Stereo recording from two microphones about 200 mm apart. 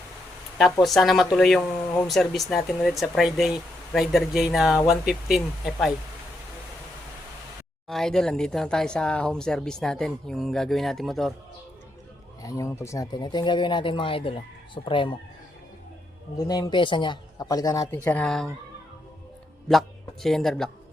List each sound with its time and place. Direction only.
0.6 s speech: centre (ahead or behind)
7.9 s speech: centre (ahead or behind)
12.4 s speech: 15° left (ahead or behind)
16.5 s speech: 20° left (ahead or behind); by 18.4 s 5° left (ahead or behind)
20.2 s speech: centre (ahead or behind)